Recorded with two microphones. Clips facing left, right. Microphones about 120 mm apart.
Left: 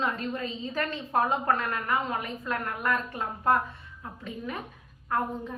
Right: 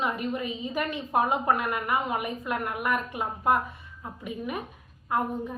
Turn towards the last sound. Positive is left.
turn(degrees=-15)  # may be behind; listen again after turning